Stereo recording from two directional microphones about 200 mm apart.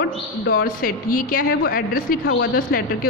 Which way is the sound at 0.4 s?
50° left (ahead or behind).